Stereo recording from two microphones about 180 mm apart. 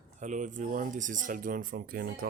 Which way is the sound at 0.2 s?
45° right (ahead or behind).